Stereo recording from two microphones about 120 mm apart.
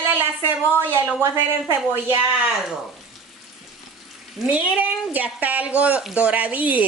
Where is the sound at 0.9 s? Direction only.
20° right (ahead or behind).